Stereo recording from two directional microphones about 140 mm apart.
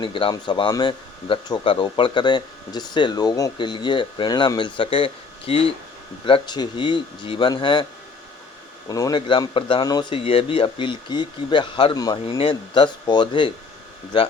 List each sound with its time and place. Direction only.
0.0 s speech: 35° left (ahead or behind)
8.9 s speech: 25° left (ahead or behind)
9.2 s speech: 35° left (ahead or behind)